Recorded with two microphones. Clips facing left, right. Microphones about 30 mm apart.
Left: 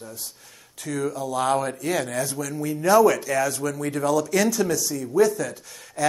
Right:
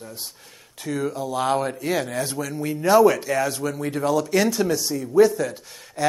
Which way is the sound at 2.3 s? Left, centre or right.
Right.